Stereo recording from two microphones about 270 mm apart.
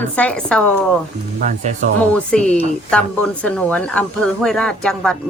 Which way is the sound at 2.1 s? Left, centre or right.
Centre.